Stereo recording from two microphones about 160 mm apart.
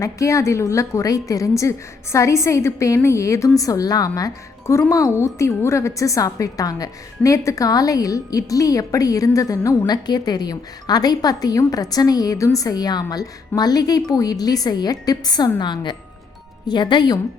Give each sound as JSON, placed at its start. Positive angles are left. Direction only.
{"t": 0.0, "sound": "a woman's voice", "side_deg": 20}